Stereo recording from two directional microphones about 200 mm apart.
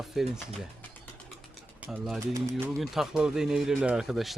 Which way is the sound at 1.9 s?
Centre (ahead or behind).